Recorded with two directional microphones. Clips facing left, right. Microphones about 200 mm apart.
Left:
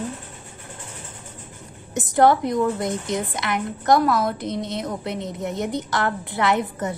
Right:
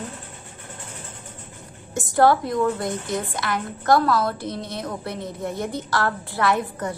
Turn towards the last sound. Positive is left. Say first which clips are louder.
# left 1 dB
turn(degrees=20)  # may be behind; listen again after turning